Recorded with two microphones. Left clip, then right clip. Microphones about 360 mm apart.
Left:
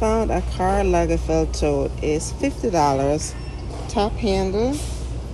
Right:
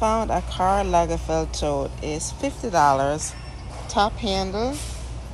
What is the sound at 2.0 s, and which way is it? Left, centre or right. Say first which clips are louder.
Speech: left 6 dB; right.